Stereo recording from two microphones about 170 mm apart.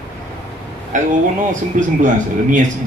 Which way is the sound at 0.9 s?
50° right (ahead or behind).